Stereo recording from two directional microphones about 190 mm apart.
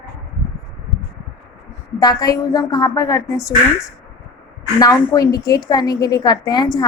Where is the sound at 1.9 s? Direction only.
20° left (ahead or behind).